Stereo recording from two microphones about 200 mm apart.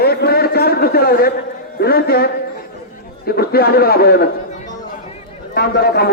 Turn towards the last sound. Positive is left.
turn(degrees=50)  # may be behind; listen again after turning